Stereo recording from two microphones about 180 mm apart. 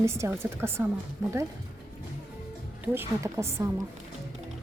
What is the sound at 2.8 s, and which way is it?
Speech, 15° right (ahead or behind).